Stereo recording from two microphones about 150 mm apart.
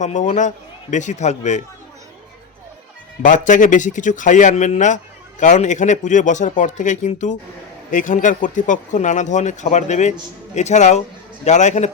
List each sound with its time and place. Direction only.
0.0 s speech: 55° left (ahead or behind)
3.2 s a man's voice: 60° left (ahead or behind)